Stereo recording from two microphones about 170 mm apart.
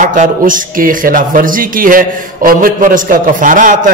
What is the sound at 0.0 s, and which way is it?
A man's voice, 50° right (ahead or behind).